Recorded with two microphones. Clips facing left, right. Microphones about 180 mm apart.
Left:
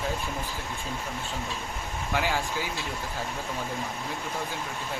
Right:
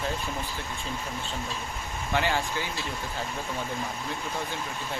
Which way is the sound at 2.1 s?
5° left (ahead or behind).